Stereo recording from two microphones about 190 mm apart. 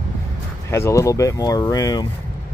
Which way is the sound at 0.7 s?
15° left (ahead or behind).